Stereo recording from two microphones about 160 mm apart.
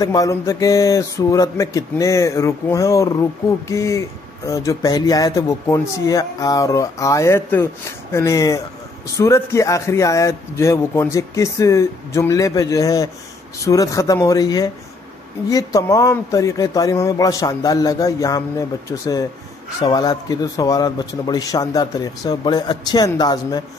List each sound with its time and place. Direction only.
0.0 s speech: 20° left (ahead or behind)